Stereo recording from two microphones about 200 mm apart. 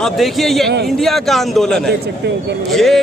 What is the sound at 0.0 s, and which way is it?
A man's voice, centre (ahead or behind).